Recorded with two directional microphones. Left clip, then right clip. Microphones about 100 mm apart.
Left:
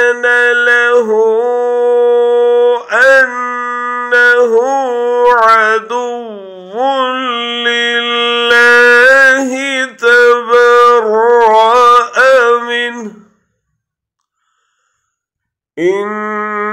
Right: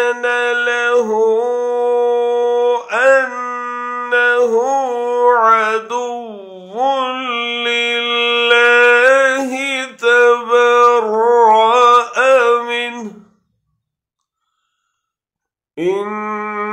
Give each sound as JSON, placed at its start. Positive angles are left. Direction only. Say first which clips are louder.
{"t": 0.0, "sound": "a sound", "louder": "left 6 dB", "side_deg": 25}
{"t": 4.1, "sound": "mantra", "louder": "left 5 dB", "side_deg": 25}
{"t": 15.7, "sound": "mantra", "louder": "left 5 dB", "side_deg": 25}